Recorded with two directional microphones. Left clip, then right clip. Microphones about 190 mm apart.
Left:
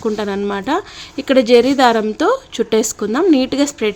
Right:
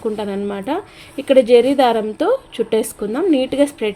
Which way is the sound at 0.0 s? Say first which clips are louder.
Left 3 dB; 25° left (ahead or behind).